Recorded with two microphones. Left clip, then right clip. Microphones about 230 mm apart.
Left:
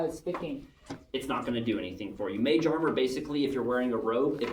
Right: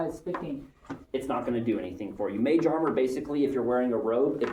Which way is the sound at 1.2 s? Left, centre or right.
Centre.